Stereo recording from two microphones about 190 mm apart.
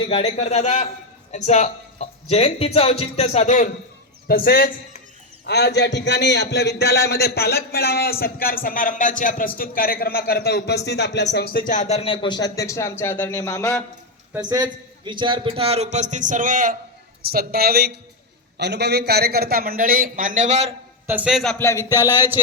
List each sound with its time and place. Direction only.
0.1 s speech: 30° left (ahead or behind)
4.3 s a man's voice: 50° left (ahead or behind); by 13.8 s 10° left (ahead or behind)
14.3 s a man's voice: 20° right (ahead or behind); by 16.7 s 45° right (ahead or behind)
17.3 s a man's voice: 55° right (ahead or behind); by 20.7 s 35° right (ahead or behind)
21.1 s a man's voice: 5° right (ahead or behind)
21.7 s speech: 15° left (ahead or behind)
22.1 s speech: 10° right (ahead or behind)